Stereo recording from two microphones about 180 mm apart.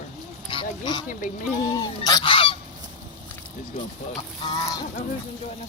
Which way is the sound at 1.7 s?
20° left (ahead or behind).